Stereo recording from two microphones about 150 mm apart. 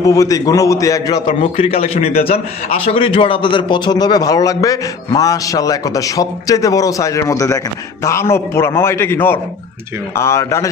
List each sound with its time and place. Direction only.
0.0 s a man's voice: 25° left (ahead or behind)
1.4 s a man's voice: 45° left (ahead or behind); by 10.7 s 20° left (ahead or behind)